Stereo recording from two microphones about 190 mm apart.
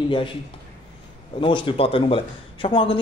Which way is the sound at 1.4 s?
25° left (ahead or behind).